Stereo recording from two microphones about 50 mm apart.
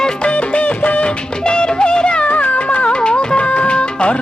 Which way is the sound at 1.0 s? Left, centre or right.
Centre.